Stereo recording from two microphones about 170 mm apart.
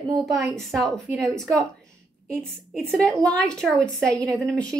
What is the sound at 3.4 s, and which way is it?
Speech, 5° left (ahead or behind).